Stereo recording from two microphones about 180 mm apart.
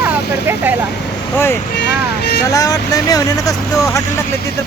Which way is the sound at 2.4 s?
20° left (ahead or behind).